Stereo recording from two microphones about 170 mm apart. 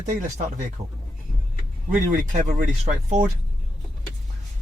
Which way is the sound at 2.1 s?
50° right (ahead or behind).